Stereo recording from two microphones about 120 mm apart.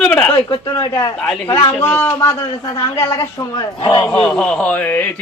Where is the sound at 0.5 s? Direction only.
35° left (ahead or behind).